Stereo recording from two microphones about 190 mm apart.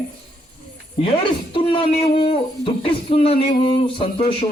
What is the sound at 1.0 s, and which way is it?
A man's voice, 30° left (ahead or behind).